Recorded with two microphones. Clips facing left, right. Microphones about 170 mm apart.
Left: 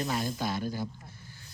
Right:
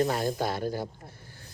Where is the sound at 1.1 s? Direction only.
55° right (ahead or behind).